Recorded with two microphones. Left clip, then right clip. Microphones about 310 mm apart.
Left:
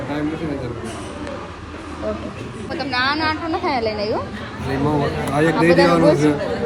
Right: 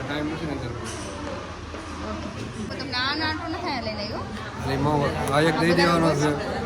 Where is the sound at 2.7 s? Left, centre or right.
Centre.